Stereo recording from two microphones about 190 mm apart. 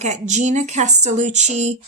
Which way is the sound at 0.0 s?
40° right (ahead or behind).